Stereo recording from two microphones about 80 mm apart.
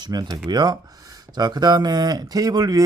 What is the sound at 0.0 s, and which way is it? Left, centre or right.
Speech, right.